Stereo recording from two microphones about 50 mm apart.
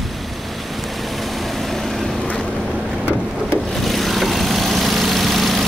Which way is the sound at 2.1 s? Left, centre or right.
Centre.